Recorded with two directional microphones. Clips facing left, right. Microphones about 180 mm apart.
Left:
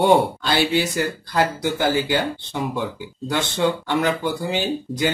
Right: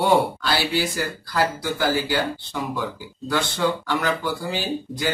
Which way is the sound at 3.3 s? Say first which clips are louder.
Left 1 dB; 25° left (ahead or behind).